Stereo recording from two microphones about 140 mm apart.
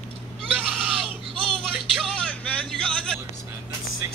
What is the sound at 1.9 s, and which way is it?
Music, 5° left (ahead or behind).